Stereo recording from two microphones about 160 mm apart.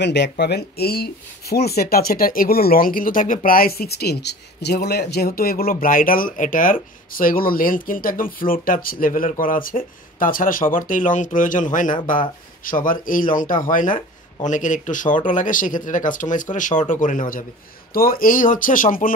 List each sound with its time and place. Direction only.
0.0 s speech: 90° left; by 17.5 s 55° left (ahead or behind)
17.9 s speech: 65° left (ahead or behind)